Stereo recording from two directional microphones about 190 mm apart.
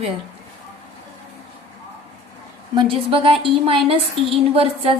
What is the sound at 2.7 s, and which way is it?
A woman's voice, 25° right (ahead or behind).